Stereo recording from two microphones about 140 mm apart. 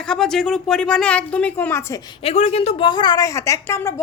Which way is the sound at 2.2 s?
50° left (ahead or behind).